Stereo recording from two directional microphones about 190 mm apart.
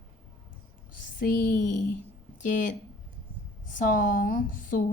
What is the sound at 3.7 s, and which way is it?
A woman's voice, 45° left (ahead or behind).